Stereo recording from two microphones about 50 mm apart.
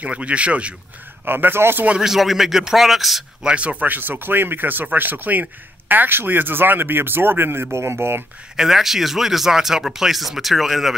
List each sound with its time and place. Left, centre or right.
0.0 s speech: right
1.2 s speech: right
2.0 s speech: centre
3.4 s speech: right
3.8 s speech: right
7.7 s speech: right
8.5 s speech: centre